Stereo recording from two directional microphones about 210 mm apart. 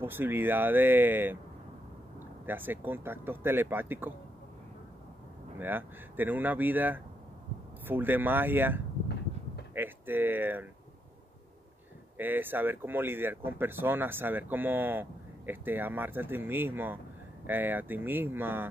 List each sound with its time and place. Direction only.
0.0 s speech: 10° right (ahead or behind)
5.6 s speech: 10° right (ahead or behind)
12.2 s speech: 10° right (ahead or behind)